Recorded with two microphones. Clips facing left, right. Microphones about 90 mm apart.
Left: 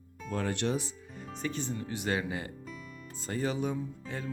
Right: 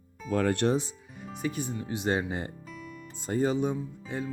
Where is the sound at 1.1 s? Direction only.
5° right (ahead or behind); by 2.5 s 30° right (ahead or behind).